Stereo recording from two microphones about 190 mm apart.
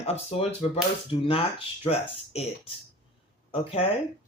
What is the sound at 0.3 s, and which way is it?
Speech, 30° left (ahead or behind).